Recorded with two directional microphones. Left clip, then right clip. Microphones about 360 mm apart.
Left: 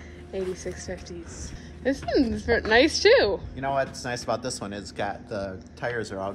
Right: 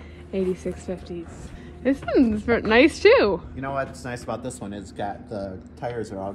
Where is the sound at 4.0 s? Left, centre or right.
Left.